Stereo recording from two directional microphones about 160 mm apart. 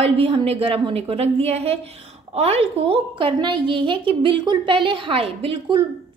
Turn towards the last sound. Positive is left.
turn(degrees=-35)  # may be behind; listen again after turning